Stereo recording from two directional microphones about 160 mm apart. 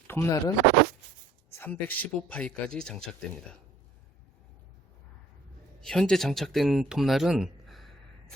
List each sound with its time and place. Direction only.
0.1 s speech: 15° left (ahead or behind)
1.5 s speech: 10° left (ahead or behind)
5.8 s speech: 5° left (ahead or behind)